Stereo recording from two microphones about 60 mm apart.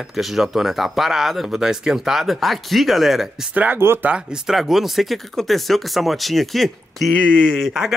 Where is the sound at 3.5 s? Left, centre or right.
Right.